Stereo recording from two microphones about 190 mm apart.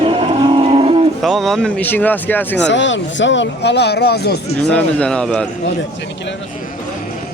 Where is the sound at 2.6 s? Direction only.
70° left (ahead or behind).